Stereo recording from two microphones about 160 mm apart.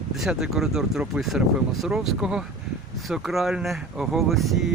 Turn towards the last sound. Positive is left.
turn(degrees=0)  # may be behind; listen again after turning